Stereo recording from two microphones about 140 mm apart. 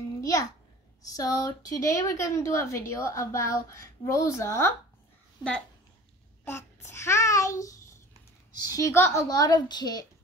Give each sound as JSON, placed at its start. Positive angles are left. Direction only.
{"t": 0.2, "sound": "babbling", "side_deg": 25}
{"t": 1.0, "sound": "a woman's voice", "side_deg": 25}
{"t": 6.4, "sound": "a woman's voice", "side_deg": 20}